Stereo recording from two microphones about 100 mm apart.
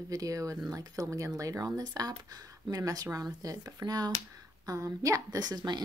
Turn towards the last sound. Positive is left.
turn(degrees=-45)  # may be behind; listen again after turning